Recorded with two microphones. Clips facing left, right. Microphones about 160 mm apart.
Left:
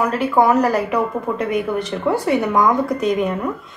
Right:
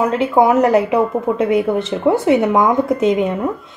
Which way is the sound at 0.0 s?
25° right (ahead or behind).